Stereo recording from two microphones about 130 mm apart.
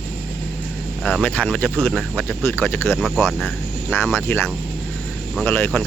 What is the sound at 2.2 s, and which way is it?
Speech, 15° left (ahead or behind).